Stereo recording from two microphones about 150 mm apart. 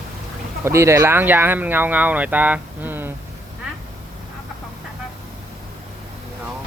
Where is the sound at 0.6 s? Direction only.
15° right (ahead or behind).